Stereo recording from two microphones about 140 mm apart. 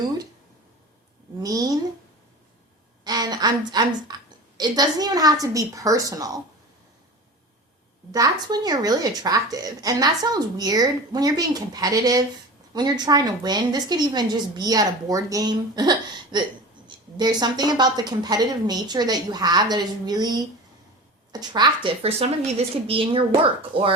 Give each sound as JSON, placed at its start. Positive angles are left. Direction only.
{"t": 1.4, "sound": "a woman's voice", "side_deg": -25}
{"t": 3.0, "sound": "a sound", "side_deg": -30}
{"t": 3.7, "sound": "a woman's voice", "side_deg": -30}
{"t": 8.1, "sound": "a woman's voice", "side_deg": -25}